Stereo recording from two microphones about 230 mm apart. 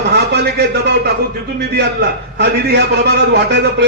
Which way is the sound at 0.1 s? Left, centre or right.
Right.